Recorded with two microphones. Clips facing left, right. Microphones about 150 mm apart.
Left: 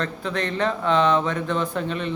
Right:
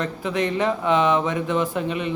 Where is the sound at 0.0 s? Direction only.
15° right (ahead or behind).